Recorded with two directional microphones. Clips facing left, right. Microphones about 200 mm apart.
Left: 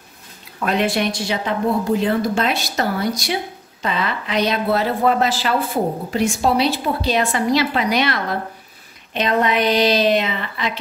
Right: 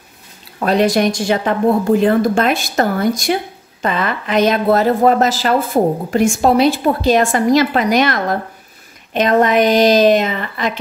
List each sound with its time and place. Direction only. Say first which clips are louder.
0.6 s a woman's voice: right 6 dB; 40° right (ahead or behind)